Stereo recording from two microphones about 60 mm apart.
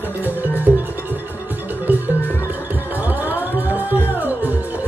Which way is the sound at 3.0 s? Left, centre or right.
Right.